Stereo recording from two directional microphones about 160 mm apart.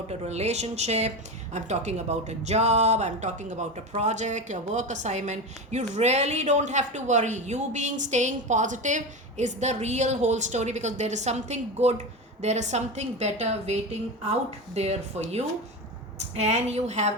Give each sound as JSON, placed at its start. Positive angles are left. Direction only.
{"t": 0.1, "sound": "speech", "side_deg": -40}
{"t": 14.8, "sound": "speech", "side_deg": -45}